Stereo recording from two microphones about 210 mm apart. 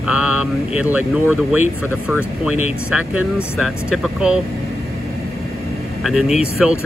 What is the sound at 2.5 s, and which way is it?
Speech, 90° left.